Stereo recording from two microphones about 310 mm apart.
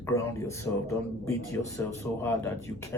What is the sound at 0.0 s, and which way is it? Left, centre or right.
Speech, centre.